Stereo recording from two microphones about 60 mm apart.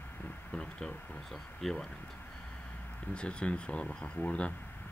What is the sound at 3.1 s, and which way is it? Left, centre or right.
A man's voice, centre.